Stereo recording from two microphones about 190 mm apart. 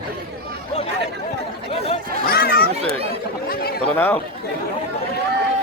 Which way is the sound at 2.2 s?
55° left (ahead or behind).